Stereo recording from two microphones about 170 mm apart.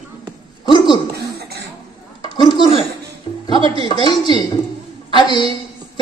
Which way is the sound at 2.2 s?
25° left (ahead or behind).